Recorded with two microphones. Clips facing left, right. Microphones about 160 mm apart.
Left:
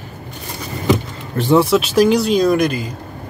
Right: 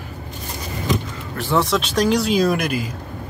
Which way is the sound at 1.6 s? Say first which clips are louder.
Left 4 dB; 10° left (ahead or behind).